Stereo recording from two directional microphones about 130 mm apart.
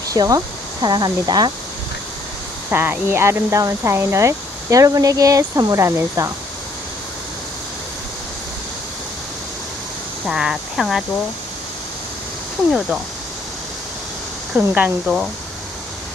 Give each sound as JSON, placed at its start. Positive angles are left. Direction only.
{"t": 0.1, "sound": "speech", "side_deg": -25}
{"t": 2.6, "sound": "speech", "side_deg": -15}
{"t": 10.2, "sound": "speech", "side_deg": -5}
{"t": 14.5, "sound": "speech", "side_deg": -10}